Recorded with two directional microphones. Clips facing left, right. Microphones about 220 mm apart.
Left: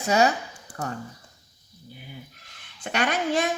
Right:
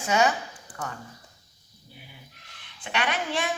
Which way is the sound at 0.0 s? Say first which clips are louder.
Left 2 dB; 40° left (ahead or behind).